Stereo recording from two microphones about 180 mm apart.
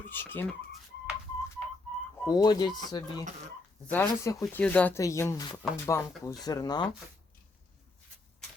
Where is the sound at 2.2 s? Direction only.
20° left (ahead or behind).